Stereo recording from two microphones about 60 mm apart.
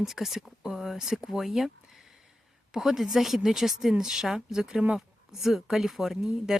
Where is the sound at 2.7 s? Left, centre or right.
Centre.